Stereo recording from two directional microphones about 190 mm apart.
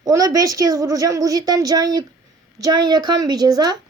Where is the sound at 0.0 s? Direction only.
20° right (ahead or behind).